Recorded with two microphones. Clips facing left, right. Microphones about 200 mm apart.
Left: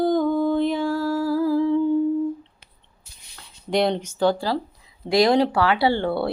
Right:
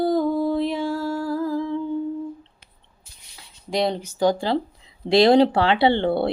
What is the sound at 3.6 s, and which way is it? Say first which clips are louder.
Speech: left 2 dB; centre (ahead or behind).